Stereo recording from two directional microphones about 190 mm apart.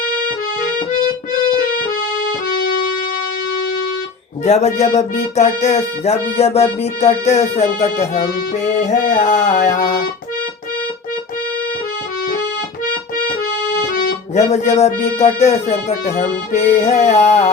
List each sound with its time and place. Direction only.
4.4 s music: 35° left (ahead or behind)
13.9 s music: 35° left (ahead or behind)